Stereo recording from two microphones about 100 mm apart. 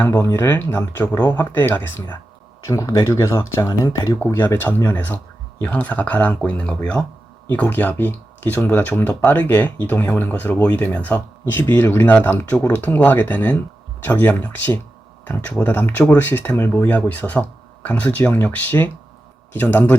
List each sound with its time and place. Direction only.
0.2 s speech: 25° left (ahead or behind)
1.1 s speech: 40° left (ahead or behind)
1.4 s speech: 20° left (ahead or behind)
2.6 s speech: 30° left (ahead or behind)